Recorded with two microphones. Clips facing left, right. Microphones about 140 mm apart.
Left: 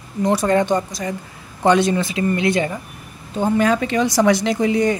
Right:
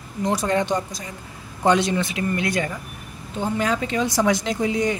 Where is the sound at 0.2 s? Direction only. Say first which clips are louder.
Left 5 dB; 60° left (ahead or behind).